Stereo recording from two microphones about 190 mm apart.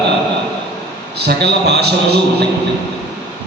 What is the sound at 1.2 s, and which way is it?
Speech, 60° right (ahead or behind).